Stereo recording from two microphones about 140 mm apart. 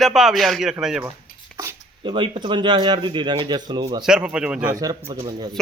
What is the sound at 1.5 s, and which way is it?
Speech, 35° right (ahead or behind).